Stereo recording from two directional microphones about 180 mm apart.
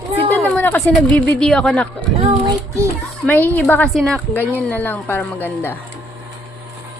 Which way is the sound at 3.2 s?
10° left (ahead or behind).